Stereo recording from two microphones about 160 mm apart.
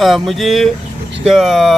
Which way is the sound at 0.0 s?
Centre (ahead or behind).